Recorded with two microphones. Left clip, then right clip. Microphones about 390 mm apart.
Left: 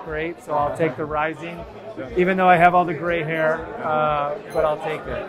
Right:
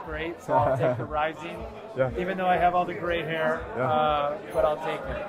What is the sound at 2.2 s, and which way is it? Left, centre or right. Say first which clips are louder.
Speech: left 11 dB; left.